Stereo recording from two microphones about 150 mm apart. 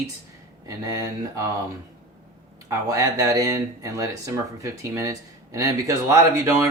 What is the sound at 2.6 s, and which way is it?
Speech, 25° right (ahead or behind).